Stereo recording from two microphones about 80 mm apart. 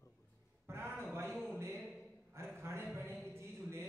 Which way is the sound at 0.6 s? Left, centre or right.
Right.